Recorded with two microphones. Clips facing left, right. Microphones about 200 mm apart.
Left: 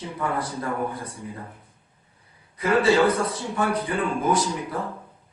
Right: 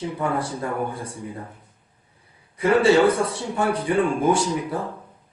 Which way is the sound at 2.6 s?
30° right (ahead or behind).